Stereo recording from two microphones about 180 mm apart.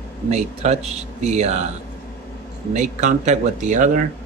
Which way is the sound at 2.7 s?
40° right (ahead or behind).